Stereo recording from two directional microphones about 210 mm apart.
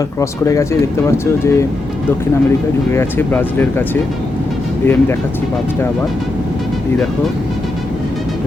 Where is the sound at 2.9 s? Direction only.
10° left (ahead or behind).